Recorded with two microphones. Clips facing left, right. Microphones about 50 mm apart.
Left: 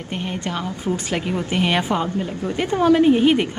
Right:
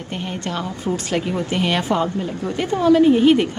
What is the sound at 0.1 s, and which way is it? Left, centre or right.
Speech, centre.